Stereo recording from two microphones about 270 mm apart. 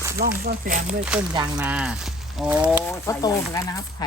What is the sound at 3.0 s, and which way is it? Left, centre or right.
Speech, centre.